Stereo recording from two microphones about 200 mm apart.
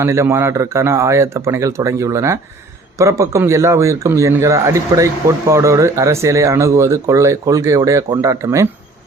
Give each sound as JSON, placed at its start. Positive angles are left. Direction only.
{"t": 0.0, "sound": "speech", "side_deg": -15}